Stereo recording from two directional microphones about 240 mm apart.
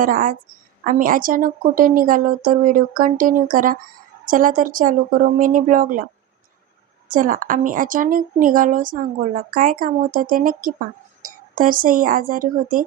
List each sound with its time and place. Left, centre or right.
0.0 s a woman's voice: right
7.1 s a woman's voice: right